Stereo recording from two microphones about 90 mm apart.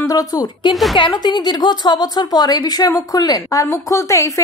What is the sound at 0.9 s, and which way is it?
A woman's voice, 55° left (ahead or behind).